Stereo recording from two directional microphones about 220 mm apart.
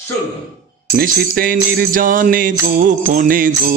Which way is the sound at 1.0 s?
40° right (ahead or behind).